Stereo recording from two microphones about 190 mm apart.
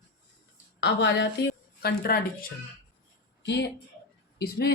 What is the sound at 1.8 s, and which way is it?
Speech, 50° left (ahead or behind).